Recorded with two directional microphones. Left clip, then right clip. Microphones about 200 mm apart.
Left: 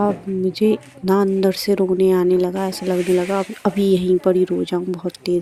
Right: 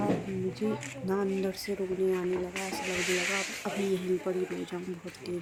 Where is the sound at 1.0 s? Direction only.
35° left (ahead or behind).